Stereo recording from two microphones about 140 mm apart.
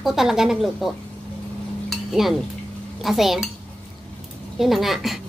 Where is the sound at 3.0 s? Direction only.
Centre (ahead or behind).